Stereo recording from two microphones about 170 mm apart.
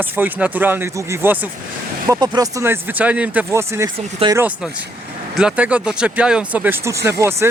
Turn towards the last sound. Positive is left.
turn(degrees=-15)  # may be behind; listen again after turning